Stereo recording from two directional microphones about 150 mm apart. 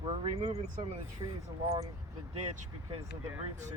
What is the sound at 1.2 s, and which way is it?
Speech, 30° right (ahead or behind).